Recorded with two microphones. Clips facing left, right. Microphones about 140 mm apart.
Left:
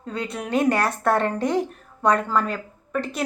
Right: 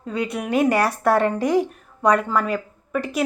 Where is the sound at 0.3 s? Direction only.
10° right (ahead or behind).